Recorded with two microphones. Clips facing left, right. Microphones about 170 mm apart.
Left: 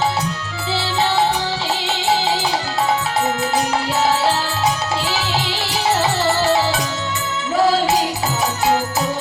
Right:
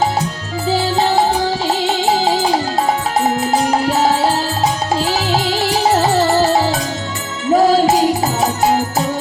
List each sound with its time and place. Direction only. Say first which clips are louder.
0.7 s music: right 5 dB; 40° right (ahead or behind)
3.7 s music: right 4 dB; 40° right (ahead or behind)